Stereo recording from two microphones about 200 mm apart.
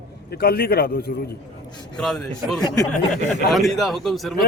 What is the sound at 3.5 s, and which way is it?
Speech, centre (ahead or behind).